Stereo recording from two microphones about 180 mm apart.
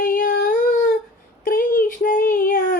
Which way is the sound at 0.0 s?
50° left (ahead or behind).